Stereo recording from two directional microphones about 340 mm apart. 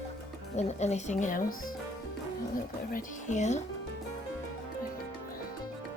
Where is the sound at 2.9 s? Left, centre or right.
Left.